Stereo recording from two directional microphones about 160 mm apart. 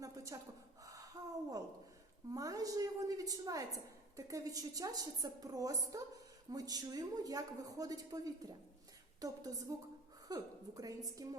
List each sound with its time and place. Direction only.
0.0 s a woman's voice: 20° right (ahead or behind)
1.2 s a sound: 25° right (ahead or behind)
2.3 s a woman's voice: 20° right (ahead or behind)